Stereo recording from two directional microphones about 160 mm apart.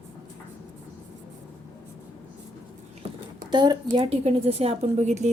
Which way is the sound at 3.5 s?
30° right (ahead or behind).